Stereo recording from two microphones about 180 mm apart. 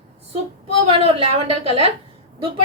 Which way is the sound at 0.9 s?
30° right (ahead or behind).